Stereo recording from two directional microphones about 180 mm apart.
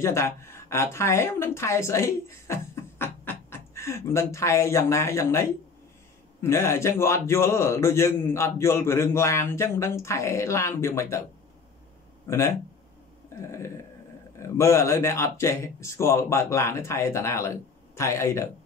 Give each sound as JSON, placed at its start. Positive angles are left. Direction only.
{"t": 0.0, "sound": "a woman's voice", "side_deg": 15}
{"t": 12.3, "sound": "a man's voice", "side_deg": 15}
{"t": 13.3, "sound": "a sound", "side_deg": 15}
{"t": 14.4, "sound": "a man's voice", "side_deg": 15}